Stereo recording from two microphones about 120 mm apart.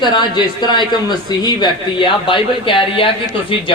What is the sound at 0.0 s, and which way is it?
Speech, 40° left (ahead or behind).